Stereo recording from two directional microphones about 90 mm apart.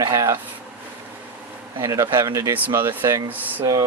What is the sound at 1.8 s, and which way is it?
Speech, 40° right (ahead or behind).